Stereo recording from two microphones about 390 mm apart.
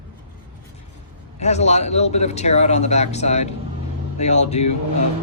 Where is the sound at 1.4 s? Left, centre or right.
Centre.